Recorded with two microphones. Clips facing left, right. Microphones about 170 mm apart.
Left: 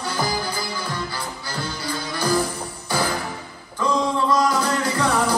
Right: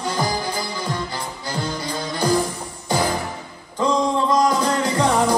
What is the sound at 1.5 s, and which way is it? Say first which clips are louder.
Music: right 3 dB; 20° right (ahead or behind).